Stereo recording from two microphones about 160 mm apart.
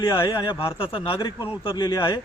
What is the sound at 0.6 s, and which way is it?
Speech, 20° left (ahead or behind).